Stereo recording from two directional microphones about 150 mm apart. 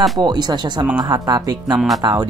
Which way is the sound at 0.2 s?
30° right (ahead or behind).